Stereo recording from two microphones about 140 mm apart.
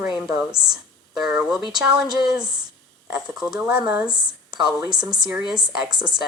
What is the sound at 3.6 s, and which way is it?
A woman's voice, 10° right (ahead or behind).